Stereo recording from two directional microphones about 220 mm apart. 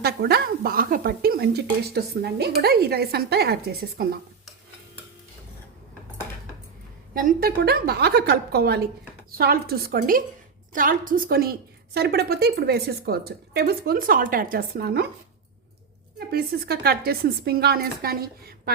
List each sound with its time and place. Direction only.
0.0 s speech: 45° right (ahead or behind)
7.1 s a woman's voice: 40° right (ahead or behind)
16.1 s speech: 45° right (ahead or behind)